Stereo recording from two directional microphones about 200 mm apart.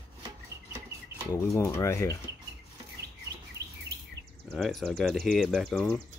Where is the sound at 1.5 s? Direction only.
10° left (ahead or behind).